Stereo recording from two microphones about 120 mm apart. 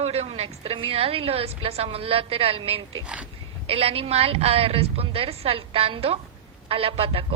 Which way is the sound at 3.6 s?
55° right (ahead or behind).